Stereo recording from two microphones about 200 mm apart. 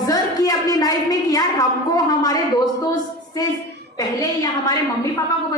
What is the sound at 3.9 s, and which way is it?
A woman's voice, 20° left (ahead or behind).